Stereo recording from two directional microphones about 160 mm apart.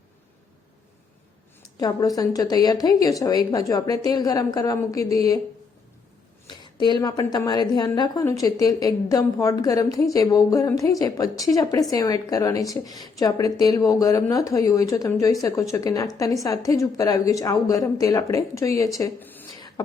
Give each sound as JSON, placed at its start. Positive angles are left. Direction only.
{"t": 1.8, "sound": "a woman's voice", "side_deg": 25}
{"t": 6.5, "sound": "a woman's voice", "side_deg": 25}
{"t": 19.5, "sound": "beatboxing", "side_deg": 25}